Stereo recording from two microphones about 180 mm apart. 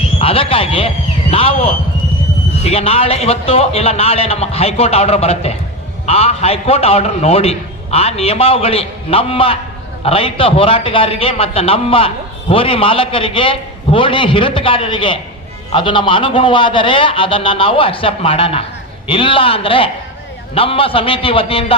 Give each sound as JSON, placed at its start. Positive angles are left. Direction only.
{"t": 0.2, "sound": "a man's voice", "side_deg": 30}